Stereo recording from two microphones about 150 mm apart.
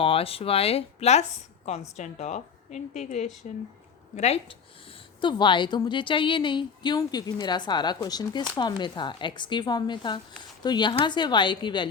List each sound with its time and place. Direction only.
0.0 s a woman's voice: 40° left (ahead or behind)